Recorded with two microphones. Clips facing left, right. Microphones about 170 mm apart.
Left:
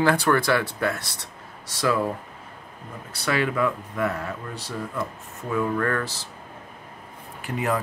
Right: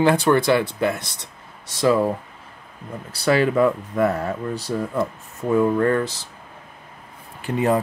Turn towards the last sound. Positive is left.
turn(degrees=-30)  # may be behind; listen again after turning